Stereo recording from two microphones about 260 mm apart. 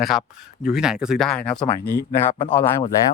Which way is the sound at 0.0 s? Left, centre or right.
Centre.